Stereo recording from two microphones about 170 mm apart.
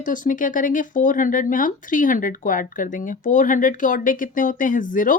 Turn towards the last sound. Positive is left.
turn(degrees=50)  # may be behind; listen again after turning